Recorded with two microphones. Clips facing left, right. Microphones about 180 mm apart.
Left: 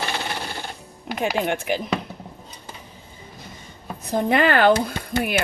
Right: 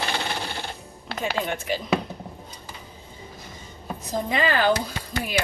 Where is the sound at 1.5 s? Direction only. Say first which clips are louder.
Left 4 dB; 60° left (ahead or behind).